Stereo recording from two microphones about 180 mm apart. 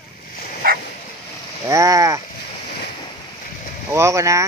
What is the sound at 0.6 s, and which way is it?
Bow-wow, 55° right (ahead or behind).